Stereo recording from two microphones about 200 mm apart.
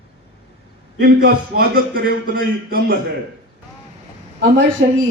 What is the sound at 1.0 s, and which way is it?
A man's voice, 50° right (ahead or behind).